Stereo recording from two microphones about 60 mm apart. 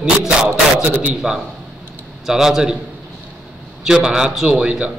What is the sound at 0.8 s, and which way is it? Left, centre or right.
Speech, right.